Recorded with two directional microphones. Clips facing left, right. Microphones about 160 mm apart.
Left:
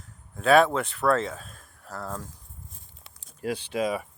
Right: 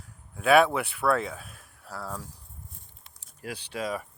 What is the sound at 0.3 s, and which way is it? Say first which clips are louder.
Speech: left 1 dB; 10° right (ahead or behind).